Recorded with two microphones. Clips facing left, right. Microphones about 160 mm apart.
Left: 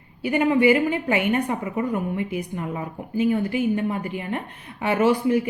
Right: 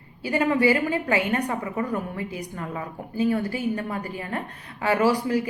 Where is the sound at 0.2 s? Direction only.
20° left (ahead or behind).